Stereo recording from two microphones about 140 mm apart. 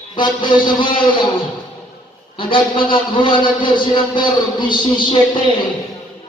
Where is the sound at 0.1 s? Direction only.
30° left (ahead or behind).